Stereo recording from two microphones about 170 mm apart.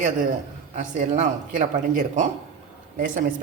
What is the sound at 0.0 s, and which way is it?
A woman's voice, 50° right (ahead or behind).